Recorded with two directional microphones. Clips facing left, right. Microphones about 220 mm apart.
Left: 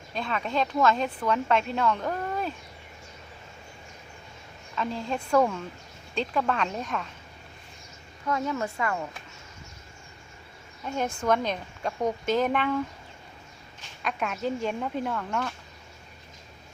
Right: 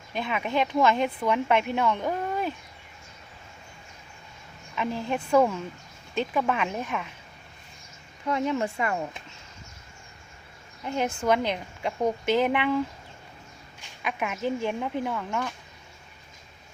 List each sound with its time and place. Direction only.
0.2 s a woman's voice: 15° right (ahead or behind)
4.7 s a woman's voice: 15° right (ahead or behind)
8.3 s speech: 20° right (ahead or behind)
11.2 s a woman's voice: 10° right (ahead or behind)
14.0 s a woman's voice: 10° right (ahead or behind)